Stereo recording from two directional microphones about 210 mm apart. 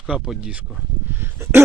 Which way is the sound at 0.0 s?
Centre (ahead or behind).